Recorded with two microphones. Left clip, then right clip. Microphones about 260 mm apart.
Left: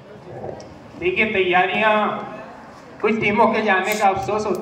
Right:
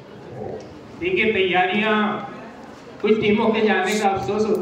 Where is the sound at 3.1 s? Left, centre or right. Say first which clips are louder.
Left 4 dB; centre.